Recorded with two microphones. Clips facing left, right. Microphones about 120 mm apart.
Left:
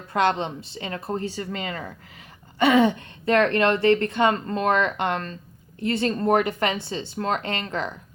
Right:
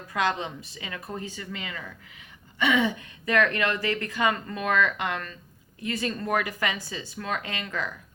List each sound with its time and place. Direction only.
0.1 s a woman's voice: 30° left (ahead or behind)